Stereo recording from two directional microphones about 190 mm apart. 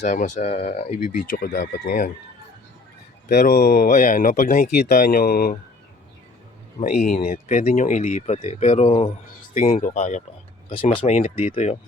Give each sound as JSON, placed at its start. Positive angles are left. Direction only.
{"t": 0.0, "sound": "speech", "side_deg": 40}
{"t": 3.2, "sound": "speech", "side_deg": 45}
{"t": 6.8, "sound": "speech", "side_deg": 50}